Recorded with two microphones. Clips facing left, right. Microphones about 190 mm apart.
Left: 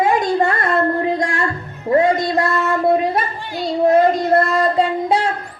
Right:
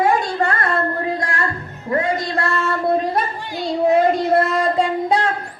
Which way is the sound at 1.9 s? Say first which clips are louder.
Left 6 dB; 25° left (ahead or behind).